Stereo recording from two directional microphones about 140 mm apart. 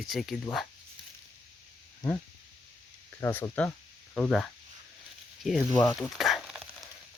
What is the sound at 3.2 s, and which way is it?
Speech, 15° left (ahead or behind).